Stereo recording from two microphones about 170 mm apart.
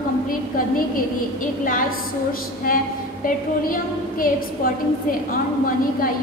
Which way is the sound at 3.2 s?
55° left (ahead or behind).